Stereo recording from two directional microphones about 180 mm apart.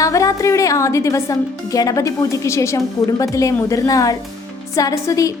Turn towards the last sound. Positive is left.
turn(degrees=20)  # may be behind; listen again after turning